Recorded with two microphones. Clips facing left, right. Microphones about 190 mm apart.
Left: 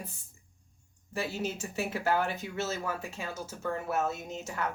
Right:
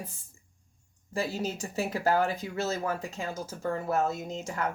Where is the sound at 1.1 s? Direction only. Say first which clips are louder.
Right 2 dB; 40° right (ahead or behind).